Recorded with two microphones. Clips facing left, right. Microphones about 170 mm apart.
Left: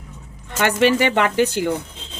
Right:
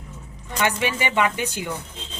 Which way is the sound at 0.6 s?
75° left (ahead or behind).